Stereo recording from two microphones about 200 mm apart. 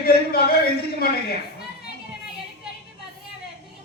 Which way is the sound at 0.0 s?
50° left (ahead or behind).